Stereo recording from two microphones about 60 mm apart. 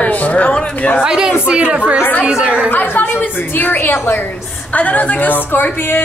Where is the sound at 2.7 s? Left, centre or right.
Left.